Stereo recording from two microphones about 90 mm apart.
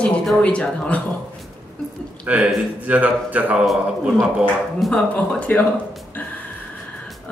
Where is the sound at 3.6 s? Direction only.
Centre (ahead or behind).